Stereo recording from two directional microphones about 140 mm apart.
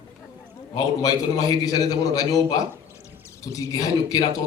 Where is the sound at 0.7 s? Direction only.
25° left (ahead or behind).